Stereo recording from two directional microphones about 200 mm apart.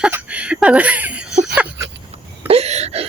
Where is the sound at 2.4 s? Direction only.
30° right (ahead or behind).